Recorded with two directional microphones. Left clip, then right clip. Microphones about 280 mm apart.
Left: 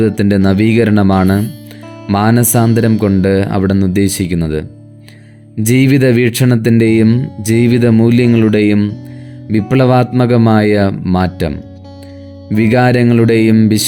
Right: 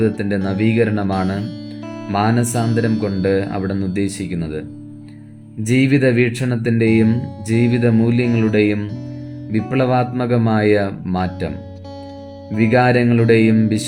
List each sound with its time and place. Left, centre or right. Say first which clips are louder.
0.0 s speech: left 7 dB; left
5.6 s speech: left 4 dB; left